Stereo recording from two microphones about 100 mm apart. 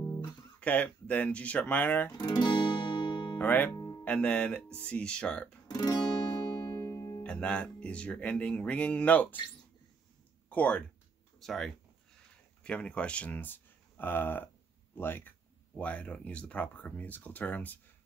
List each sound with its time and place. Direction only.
0.0 s guitar: 35° left (ahead or behind)
0.6 s speech: 15° left (ahead or behind)
2.1 s guitar: 45° left (ahead or behind)
3.3 s speech: 20° left (ahead or behind)
3.7 s music: 40° left (ahead or behind)
4.0 s speech: 10° left (ahead or behind)
5.7 s guitar: 40° left (ahead or behind)
6.4 s music: 40° left (ahead or behind)
7.2 s speech: 10° left (ahead or behind)
10.5 s speech: 15° left (ahead or behind)
11.3 s speech: centre (ahead or behind)